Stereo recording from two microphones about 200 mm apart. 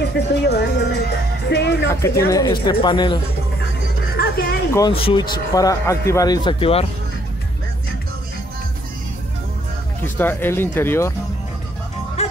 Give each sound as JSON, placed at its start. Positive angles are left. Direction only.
{"t": 0.3, "sound": "speech", "side_deg": 55}
{"t": 1.9, "sound": "a man's voice", "side_deg": 15}
{"t": 4.2, "sound": "music", "side_deg": 50}
{"t": 4.7, "sound": "a man's voice", "side_deg": 25}
{"t": 10.0, "sound": "speech", "side_deg": 10}
{"t": 12.2, "sound": "music", "side_deg": 30}